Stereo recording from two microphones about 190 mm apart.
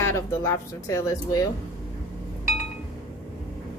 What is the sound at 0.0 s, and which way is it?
Speech, 15° left (ahead or behind).